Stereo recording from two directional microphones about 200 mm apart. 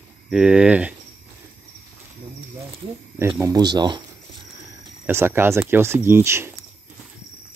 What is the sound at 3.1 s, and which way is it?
Speech, 10° right (ahead or behind).